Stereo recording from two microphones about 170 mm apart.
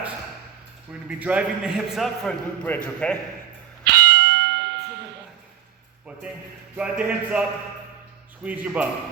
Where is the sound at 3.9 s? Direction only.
85° right.